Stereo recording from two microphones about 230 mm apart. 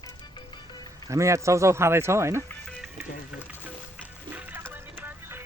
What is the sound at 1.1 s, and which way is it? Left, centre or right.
Speech, centre.